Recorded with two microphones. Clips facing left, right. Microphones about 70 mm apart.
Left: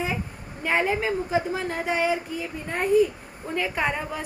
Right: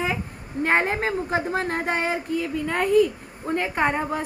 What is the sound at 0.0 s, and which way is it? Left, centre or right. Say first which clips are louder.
A woman's voice: right 2 dB; right.